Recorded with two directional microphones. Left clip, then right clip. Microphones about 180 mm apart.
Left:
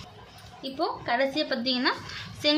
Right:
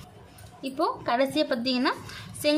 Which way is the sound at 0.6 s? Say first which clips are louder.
Right 2 dB; 30° right (ahead or behind).